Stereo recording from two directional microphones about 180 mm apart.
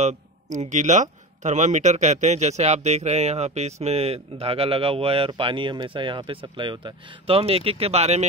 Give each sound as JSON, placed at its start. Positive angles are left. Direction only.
{"t": 0.0, "sound": "a man's voice", "side_deg": -40}